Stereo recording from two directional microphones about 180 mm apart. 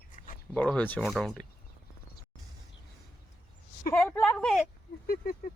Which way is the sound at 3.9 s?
5° left (ahead or behind).